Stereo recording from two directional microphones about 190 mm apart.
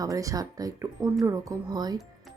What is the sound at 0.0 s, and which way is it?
Speech, 15° right (ahead or behind).